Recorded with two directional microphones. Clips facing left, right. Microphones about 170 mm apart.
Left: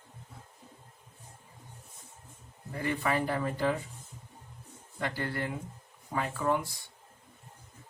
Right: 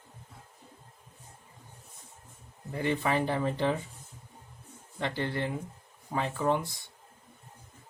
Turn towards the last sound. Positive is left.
turn(degrees=-25)  # may be behind; listen again after turning